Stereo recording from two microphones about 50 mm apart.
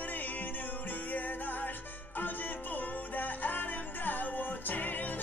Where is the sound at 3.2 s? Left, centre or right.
Left.